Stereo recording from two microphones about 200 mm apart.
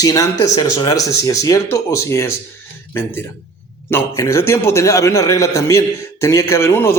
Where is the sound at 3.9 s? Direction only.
15° left (ahead or behind).